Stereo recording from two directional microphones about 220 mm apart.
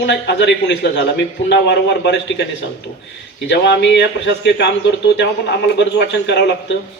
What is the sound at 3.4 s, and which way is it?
A man's voice, 55° left (ahead or behind).